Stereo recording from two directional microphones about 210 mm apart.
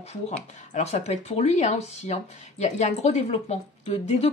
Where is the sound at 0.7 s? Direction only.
35° left (ahead or behind).